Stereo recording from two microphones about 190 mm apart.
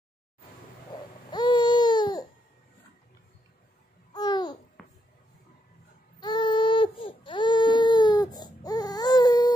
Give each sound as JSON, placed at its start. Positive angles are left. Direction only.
{"t": 1.3, "sound": "baby cry", "side_deg": 25}
{"t": 4.1, "sound": "babbling", "side_deg": 20}
{"t": 4.8, "sound": "a sound", "side_deg": 0}
{"t": 6.1, "sound": "baby cry", "side_deg": 25}